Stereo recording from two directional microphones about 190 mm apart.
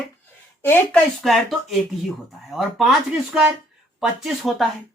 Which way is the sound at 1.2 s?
Centre (ahead or behind).